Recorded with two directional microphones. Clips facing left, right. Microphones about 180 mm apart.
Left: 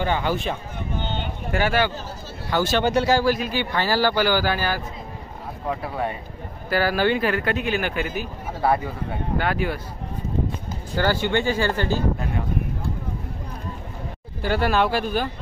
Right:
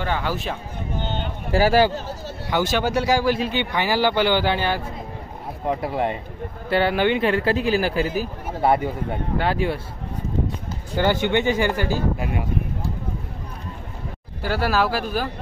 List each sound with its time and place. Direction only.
0.0 s speech: centre (ahead or behind)
1.5 s speech: 35° right (ahead or behind)
2.5 s speech: 15° right (ahead or behind)
3.3 s speech: 30° right (ahead or behind)
3.7 s speech: 15° right (ahead or behind)
11.0 s speech: 20° right (ahead or behind)
14.4 s speech: 5° right (ahead or behind)